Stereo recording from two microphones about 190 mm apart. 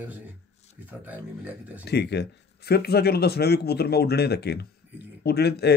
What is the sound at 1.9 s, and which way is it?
Speech, 60° left (ahead or behind).